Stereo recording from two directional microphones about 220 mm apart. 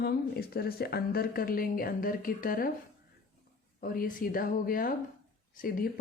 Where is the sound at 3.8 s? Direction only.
40° left (ahead or behind).